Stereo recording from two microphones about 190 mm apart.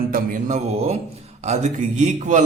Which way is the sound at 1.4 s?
35° right (ahead or behind).